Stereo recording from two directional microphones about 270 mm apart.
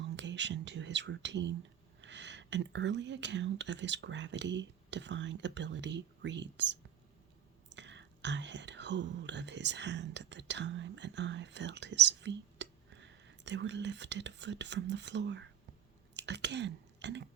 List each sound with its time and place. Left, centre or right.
0.0 s speech: right